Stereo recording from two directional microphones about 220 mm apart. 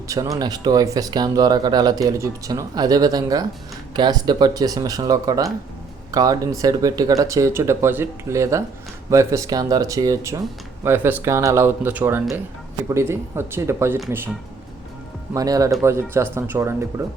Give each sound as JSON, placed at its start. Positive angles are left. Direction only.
{"t": 0.1, "sound": "speech", "side_deg": -15}
{"t": 15.3, "sound": "speech", "side_deg": -15}